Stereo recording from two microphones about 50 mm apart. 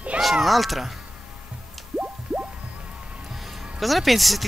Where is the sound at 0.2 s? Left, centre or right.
Centre.